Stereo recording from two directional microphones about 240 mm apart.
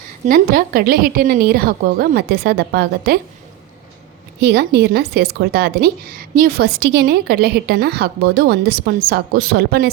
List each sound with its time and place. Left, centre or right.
0.3 s a woman's voice: right
4.4 s a woman's voice: right